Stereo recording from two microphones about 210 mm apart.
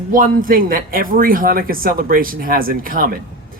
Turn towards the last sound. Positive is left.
turn(degrees=-40)  # may be behind; listen again after turning